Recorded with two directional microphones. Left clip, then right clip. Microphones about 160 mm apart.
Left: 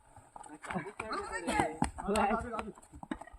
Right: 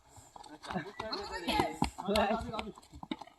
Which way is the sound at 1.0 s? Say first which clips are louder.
Even; 5° right (ahead or behind).